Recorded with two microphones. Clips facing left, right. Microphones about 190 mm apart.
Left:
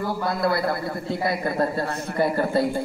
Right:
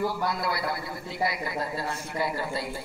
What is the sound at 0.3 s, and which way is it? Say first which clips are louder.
A man's voice: left 7 dB; 55° left (ahead or behind).